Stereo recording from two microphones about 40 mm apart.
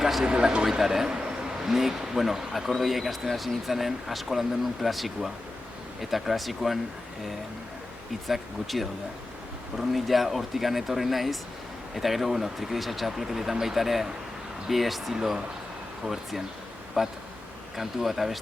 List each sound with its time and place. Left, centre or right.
0.0 s a sound: centre
0.3 s speech: right; by 6.7 s centre
8.3 s speech: centre
17.0 s speech: centre